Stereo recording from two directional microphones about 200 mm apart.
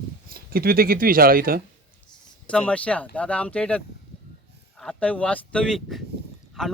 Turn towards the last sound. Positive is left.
turn(degrees=5)  # may be behind; listen again after turning